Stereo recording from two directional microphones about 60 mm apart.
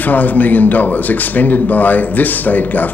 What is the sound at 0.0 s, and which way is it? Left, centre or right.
Speech, left.